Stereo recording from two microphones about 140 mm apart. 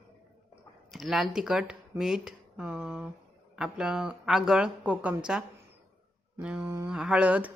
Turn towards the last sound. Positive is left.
turn(degrees=-10)  # may be behind; listen again after turning